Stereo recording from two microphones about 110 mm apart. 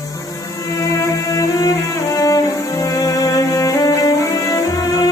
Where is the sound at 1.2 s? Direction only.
30° left (ahead or behind).